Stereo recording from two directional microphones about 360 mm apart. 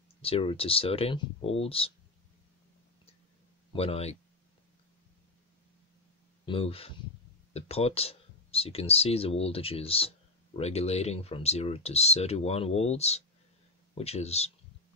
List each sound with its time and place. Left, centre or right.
0.2 s speech: centre
3.7 s speech: centre
6.4 s speech: centre